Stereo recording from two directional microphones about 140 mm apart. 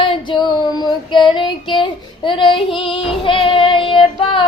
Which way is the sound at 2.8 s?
40° left (ahead or behind).